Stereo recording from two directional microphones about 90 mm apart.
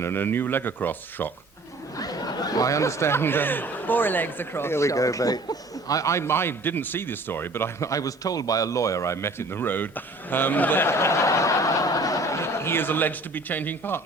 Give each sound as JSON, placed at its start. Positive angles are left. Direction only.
{"t": 0.0, "sound": "speech", "side_deg": 25}
{"t": 2.0, "sound": "speech", "side_deg": 45}